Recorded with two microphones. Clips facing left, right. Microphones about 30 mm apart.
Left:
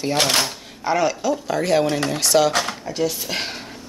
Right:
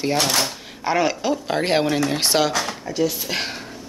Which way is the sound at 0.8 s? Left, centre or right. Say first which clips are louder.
Even; centre.